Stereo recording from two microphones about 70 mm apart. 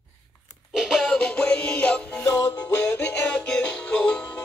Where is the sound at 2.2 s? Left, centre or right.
Left.